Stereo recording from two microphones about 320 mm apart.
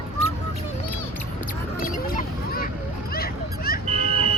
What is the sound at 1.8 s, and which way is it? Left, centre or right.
Honk, left.